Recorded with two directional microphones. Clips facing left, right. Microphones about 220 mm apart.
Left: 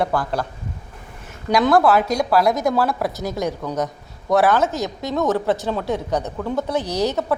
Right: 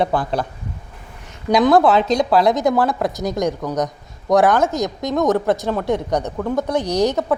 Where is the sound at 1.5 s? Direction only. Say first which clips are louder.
Right 2 dB; 20° right (ahead or behind).